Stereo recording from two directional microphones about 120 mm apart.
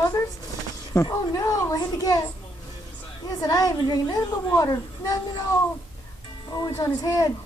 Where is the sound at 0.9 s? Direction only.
25° left (ahead or behind).